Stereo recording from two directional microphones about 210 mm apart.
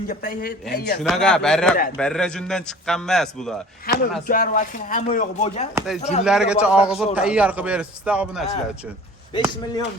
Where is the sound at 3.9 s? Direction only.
45° left (ahead or behind).